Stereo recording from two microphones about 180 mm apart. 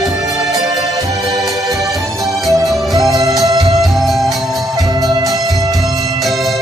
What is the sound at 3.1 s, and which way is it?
Music, 20° right (ahead or behind).